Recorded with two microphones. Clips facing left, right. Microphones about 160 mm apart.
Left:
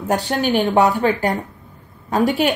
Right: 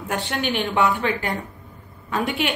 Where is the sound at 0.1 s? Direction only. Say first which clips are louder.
Left 7 dB; 40° left (ahead or behind).